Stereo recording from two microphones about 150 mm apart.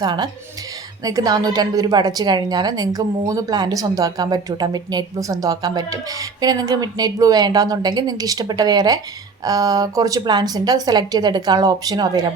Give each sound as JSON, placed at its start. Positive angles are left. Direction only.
{"t": 0.0, "sound": "a woman's voice", "side_deg": -25}